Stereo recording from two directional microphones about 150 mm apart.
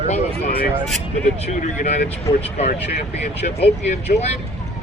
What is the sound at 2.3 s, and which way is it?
Speech, 25° left (ahead or behind).